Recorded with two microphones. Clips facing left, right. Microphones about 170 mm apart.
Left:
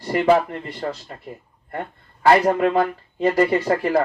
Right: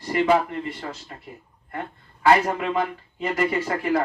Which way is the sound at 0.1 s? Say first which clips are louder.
Left 3 dB; 40° left (ahead or behind).